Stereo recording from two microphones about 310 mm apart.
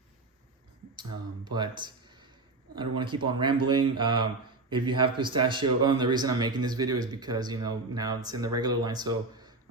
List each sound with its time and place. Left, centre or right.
0.9 s speech: centre